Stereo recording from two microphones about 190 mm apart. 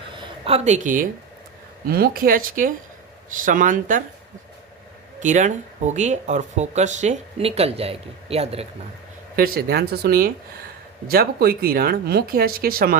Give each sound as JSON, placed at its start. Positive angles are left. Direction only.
{"t": 0.2, "sound": "speech", "side_deg": -30}
{"t": 5.2, "sound": "speech", "side_deg": -40}
{"t": 9.3, "sound": "speech", "side_deg": -50}